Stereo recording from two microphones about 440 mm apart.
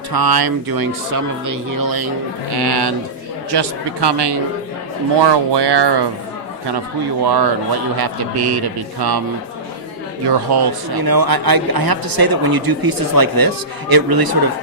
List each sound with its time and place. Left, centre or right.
0.1 s a man's voice: right
7.3 s a man's voice: right
10.2 s speech: right